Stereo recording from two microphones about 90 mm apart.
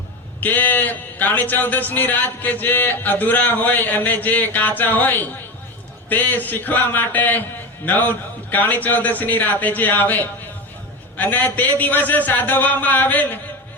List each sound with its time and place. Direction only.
0.3 s a man's voice: 20° left (ahead or behind)